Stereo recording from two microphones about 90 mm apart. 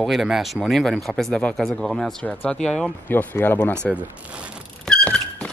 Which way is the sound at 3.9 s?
15° right (ahead or behind).